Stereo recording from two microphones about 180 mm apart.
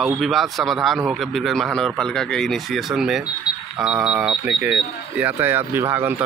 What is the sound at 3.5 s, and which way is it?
Alarm clock, 20° left (ahead or behind).